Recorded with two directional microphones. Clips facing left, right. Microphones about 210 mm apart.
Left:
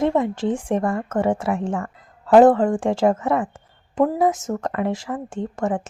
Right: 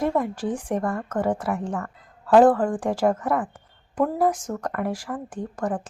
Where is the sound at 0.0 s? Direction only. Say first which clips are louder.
Left 4 dB; 25° left (ahead or behind).